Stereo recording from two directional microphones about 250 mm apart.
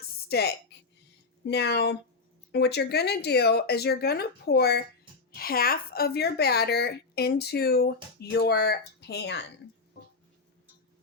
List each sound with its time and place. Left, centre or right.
0.3 s a woman's voice: left